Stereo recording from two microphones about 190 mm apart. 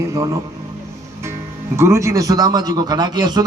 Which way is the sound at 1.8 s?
15° right (ahead or behind).